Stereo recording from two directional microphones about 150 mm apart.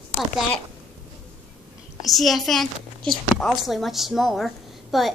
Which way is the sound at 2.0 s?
Centre (ahead or behind).